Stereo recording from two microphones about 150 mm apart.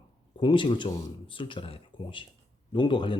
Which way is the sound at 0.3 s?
35° left (ahead or behind).